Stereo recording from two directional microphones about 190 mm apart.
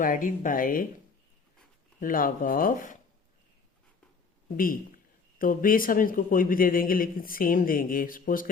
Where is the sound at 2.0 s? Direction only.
45° left (ahead or behind).